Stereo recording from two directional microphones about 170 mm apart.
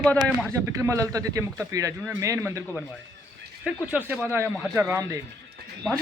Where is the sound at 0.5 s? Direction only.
15° right (ahead or behind).